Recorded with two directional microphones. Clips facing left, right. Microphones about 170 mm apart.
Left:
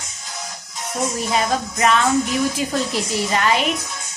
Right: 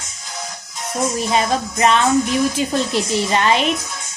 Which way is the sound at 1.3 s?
25° right (ahead or behind).